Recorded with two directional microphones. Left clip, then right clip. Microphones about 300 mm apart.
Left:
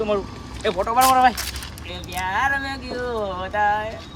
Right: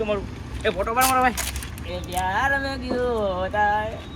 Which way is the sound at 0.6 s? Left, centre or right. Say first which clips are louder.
Left 3 dB; left.